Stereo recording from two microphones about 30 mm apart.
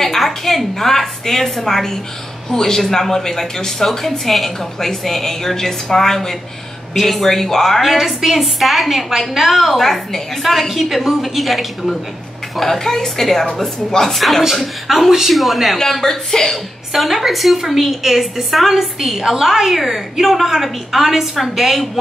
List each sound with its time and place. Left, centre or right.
0.2 s a woman's voice: centre
0.7 s speech: centre
7.8 s a woman's voice: centre
9.6 s speech: centre
10.4 s a woman's voice: centre
12.5 s speech: centre
14.1 s a woman's voice: centre
15.9 s speech: centre
16.9 s a woman's voice: centre